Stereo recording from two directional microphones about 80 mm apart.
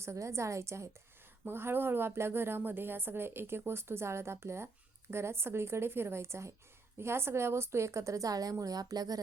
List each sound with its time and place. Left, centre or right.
0.0 s a woman's voice: right